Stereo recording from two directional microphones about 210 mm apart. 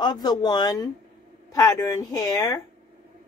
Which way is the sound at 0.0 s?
20° left (ahead or behind).